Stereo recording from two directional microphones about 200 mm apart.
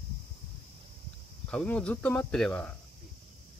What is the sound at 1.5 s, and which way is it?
Speech, 5° left (ahead or behind).